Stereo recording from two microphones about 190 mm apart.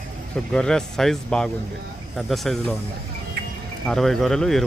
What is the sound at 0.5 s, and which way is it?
Speech, 5° left (ahead or behind).